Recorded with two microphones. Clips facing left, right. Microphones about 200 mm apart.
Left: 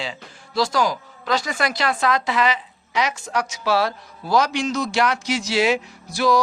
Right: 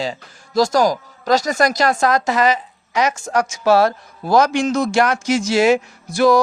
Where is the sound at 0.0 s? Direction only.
45° right (ahead or behind).